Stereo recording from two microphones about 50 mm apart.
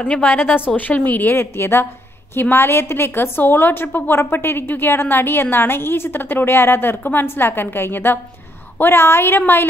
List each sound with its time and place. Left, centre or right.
0.0 s a woman's voice: left
7.0 s a woman's voice: left
7.2 s a woman's voice: left